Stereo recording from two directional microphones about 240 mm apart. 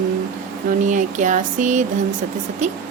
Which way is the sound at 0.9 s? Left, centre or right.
Right.